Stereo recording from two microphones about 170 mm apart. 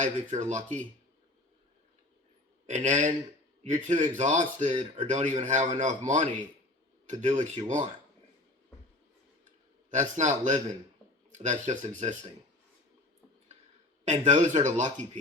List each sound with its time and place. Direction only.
0.0 s speech: 45° right (ahead or behind)
2.6 s speech: 45° right (ahead or behind)
9.9 s speech: 45° right (ahead or behind)
14.0 s speech: 45° right (ahead or behind)